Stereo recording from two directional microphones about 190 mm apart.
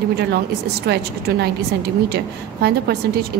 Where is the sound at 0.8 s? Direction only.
60° right (ahead or behind).